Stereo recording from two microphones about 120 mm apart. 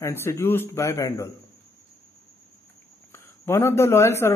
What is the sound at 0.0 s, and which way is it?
Speech, 20° left (ahead or behind).